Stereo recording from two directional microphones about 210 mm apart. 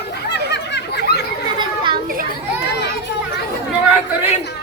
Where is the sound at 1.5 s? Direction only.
25° right (ahead or behind).